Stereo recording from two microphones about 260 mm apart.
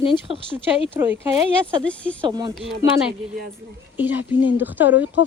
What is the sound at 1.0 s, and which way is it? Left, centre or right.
Speech, centre.